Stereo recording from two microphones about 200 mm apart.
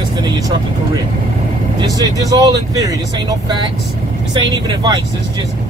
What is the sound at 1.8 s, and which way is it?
Speech, 20° right (ahead or behind).